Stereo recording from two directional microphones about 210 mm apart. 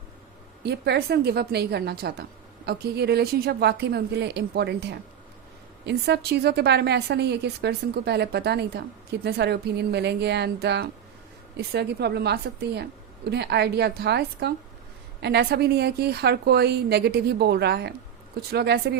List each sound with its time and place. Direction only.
0.6 s a woman's voice: 50° right (ahead or behind)